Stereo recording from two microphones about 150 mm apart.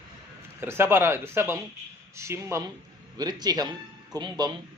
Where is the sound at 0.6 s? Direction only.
15° right (ahead or behind).